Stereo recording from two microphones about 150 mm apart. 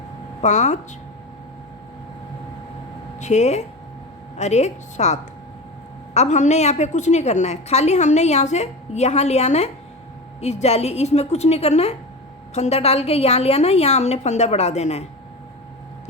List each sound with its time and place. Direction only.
0.4 s a woman's voice: 50° left (ahead or behind)
3.2 s a woman's voice: 50° left (ahead or behind)